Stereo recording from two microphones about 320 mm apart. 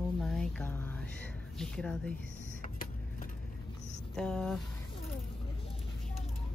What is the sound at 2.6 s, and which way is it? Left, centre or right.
Vehicle, left.